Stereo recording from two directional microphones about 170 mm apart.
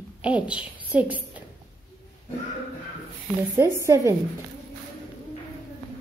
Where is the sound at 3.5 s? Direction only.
15° right (ahead or behind).